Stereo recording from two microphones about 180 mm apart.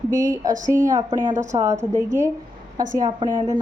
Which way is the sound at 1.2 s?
40° right (ahead or behind).